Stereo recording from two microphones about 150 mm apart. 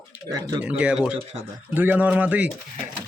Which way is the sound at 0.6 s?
10° right (ahead or behind).